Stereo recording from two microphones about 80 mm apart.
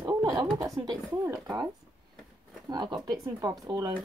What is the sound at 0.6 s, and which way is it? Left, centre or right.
Speech, right.